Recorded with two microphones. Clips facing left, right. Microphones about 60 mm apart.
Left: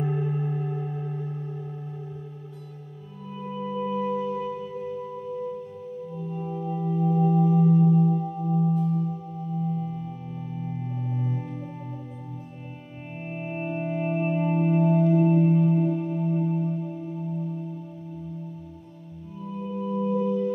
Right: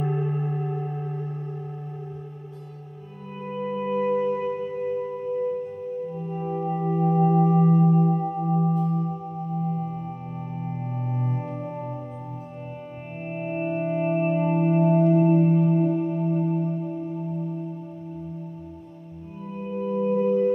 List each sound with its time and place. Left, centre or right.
0.0 s music: centre
3.4 s music: right
11.1 s music: right
13.3 s music: centre
19.5 s singing bowl: right